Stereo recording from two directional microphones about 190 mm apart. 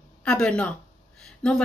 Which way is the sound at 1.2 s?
5° left (ahead or behind).